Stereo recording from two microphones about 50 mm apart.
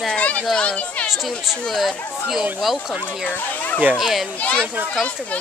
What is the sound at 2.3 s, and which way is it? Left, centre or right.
Speech, centre.